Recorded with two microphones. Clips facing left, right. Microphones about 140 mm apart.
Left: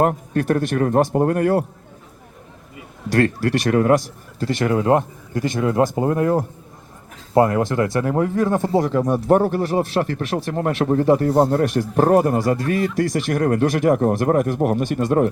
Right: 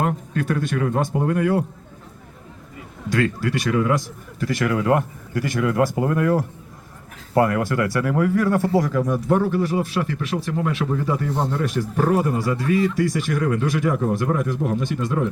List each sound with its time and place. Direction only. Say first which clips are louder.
0.0 s speech: left 5 dB; 50° left (ahead or behind)
3.1 s a man's voice: left 4 dB; 65° left (ahead or behind); by 3.9 s 50° left (ahead or behind)
4.4 s speech: left 2 dB; 30° left (ahead or behind)
9.3 s speech: left 3 dB; 45° left (ahead or behind)
11.3 s speech: left 8 dB; 35° left (ahead or behind)
11.6 s a man's voice: left 5 dB; 65° left (ahead or behind)
12.0 s a man's voice: left 5 dB; 50° left (ahead or behind)